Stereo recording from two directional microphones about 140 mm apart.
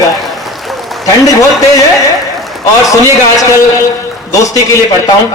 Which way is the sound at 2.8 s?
25° left (ahead or behind).